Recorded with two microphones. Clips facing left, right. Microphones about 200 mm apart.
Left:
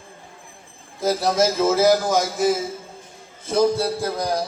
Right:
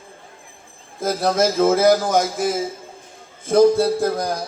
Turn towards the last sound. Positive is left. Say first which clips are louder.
# right 5 dB
turn(degrees=-50)  # may be behind; listen again after turning